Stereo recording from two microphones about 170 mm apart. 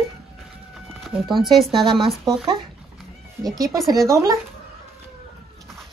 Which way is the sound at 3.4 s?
20° right (ahead or behind).